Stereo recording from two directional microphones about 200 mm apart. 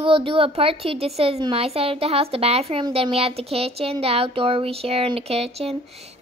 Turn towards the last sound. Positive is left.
turn(degrees=-30)  # may be behind; listen again after turning